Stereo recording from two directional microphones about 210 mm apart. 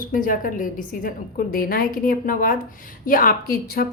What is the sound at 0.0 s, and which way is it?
A woman's voice, 40° left (ahead or behind).